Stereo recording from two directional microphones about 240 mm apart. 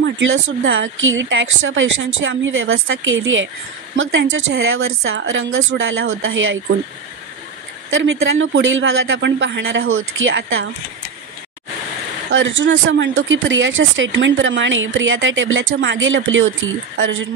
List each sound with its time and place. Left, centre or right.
0.0 s a woman's voice: right
7.9 s speech: right
12.3 s speech: right